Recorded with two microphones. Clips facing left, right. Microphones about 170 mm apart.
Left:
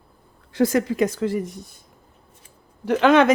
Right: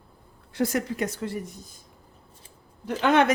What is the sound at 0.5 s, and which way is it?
A woman's voice, 90° left.